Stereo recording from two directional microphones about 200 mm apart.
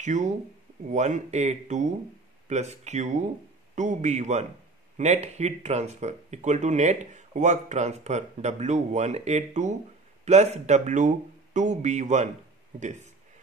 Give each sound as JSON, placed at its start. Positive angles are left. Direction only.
{"t": 0.0, "sound": "speech", "side_deg": -35}